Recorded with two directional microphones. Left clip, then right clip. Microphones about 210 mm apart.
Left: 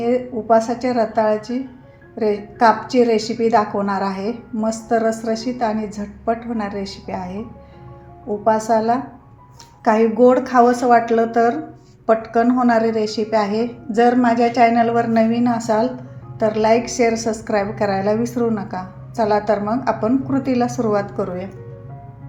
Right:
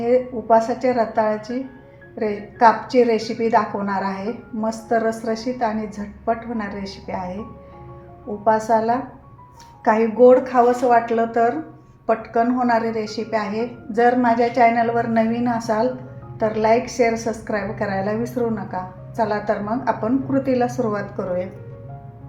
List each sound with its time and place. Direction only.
0.0 s a woman's voice: 20° left (ahead or behind)
8.4 s a woman's voice: 20° left (ahead or behind)